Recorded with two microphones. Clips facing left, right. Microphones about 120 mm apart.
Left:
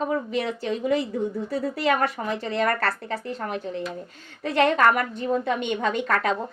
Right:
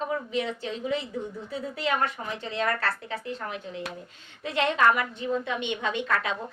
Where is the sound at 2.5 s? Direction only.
50° left (ahead or behind).